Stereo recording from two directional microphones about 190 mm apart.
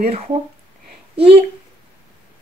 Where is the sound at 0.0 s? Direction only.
30° right (ahead or behind).